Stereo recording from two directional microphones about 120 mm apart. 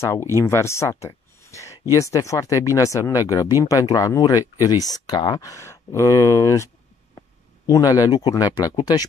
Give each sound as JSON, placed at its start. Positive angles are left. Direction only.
{"t": 0.0, "sound": "speech", "side_deg": 20}